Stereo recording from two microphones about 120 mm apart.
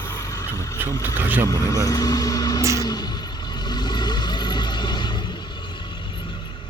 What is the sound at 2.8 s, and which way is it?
Vehicle, 35° left (ahead or behind).